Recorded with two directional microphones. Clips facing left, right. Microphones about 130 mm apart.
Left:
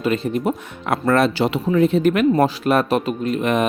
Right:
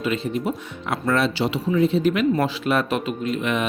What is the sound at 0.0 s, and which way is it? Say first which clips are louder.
Speech: left 4 dB; 45° left (ahead or behind).